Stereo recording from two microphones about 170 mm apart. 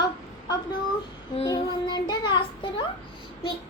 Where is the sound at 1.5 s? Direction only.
25° left (ahead or behind).